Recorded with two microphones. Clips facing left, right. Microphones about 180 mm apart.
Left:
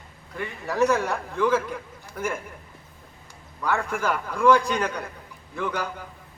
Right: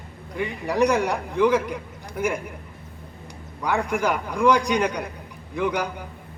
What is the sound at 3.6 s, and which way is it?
A man's voice, 15° right (ahead or behind).